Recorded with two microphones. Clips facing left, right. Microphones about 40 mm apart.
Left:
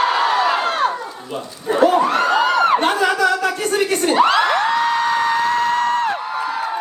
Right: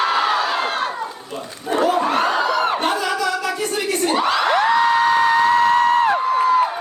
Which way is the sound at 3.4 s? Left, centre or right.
Left.